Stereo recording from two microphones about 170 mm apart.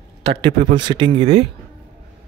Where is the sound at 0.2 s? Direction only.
30° right (ahead or behind).